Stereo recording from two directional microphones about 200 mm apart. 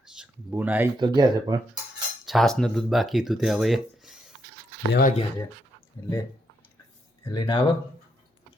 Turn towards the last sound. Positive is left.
turn(degrees=20)  # may be behind; listen again after turning